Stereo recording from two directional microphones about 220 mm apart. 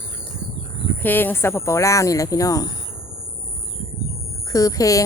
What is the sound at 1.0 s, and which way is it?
Speech, 10° left (ahead or behind).